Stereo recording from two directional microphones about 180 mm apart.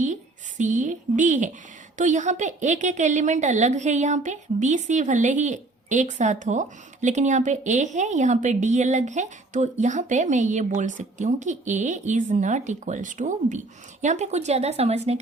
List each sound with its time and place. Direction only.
0.6 s a woman's voice: 45° right (ahead or behind)